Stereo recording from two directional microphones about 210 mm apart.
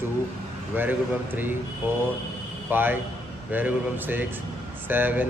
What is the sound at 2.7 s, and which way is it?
Speech, 10° right (ahead or behind).